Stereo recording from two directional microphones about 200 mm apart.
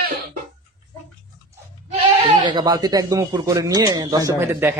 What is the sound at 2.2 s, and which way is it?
A man's voice, 25° right (ahead or behind).